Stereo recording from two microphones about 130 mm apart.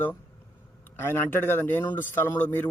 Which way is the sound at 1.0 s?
15° left (ahead or behind).